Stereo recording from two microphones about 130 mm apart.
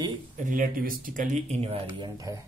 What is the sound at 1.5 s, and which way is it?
Speech, 55° right (ahead or behind).